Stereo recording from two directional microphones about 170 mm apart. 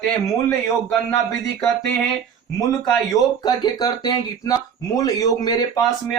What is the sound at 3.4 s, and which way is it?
Speech, 25° left (ahead or behind).